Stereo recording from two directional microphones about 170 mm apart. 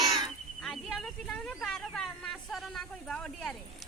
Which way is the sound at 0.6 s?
5° left (ahead or behind).